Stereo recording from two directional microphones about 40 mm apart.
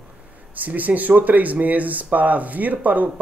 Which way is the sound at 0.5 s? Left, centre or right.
Right.